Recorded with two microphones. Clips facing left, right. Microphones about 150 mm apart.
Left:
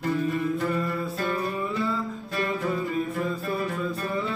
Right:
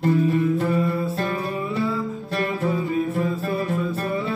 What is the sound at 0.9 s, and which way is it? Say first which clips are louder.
Music: right 4 dB; 30° right (ahead or behind).